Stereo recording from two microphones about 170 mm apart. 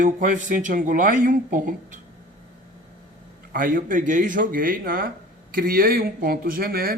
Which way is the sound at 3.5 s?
55° right (ahead or behind).